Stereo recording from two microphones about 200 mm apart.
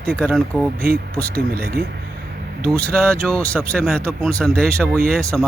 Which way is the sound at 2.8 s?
5° left (ahead or behind).